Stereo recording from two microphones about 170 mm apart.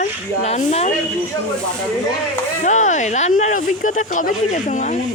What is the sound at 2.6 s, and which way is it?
Speech, 45° left (ahead or behind).